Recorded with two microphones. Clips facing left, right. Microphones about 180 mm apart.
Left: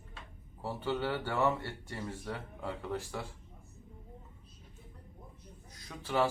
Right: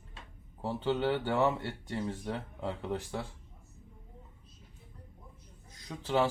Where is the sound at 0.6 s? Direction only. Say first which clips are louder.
Right 4 dB; 20° right (ahead or behind).